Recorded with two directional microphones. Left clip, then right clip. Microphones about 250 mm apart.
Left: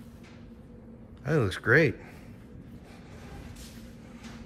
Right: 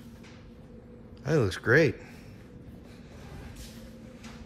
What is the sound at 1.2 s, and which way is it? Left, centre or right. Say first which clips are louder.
Speech: right 1 dB; centre.